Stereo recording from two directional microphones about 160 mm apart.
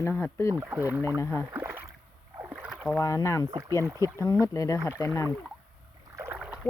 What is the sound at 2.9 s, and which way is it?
Speech, 20° left (ahead or behind).